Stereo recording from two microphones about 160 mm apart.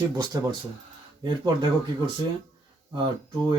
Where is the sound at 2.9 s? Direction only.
30° right (ahead or behind).